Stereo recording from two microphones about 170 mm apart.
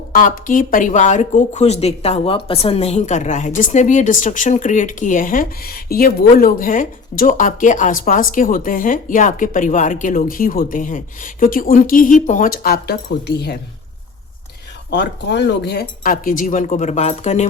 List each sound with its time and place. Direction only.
0.1 s speech: 50° left (ahead or behind); by 13.6 s 75° left (ahead or behind)
14.8 s speech: 90° left; by 17.5 s 40° left (ahead or behind)